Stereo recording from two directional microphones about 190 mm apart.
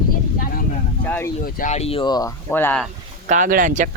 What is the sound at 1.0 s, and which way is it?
Speech, 10° left (ahead or behind).